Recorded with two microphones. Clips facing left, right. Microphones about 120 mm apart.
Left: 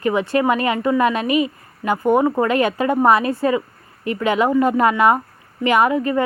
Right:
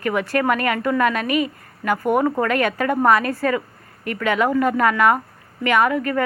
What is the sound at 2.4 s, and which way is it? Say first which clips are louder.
Speech: left 2 dB; 30° left (ahead or behind).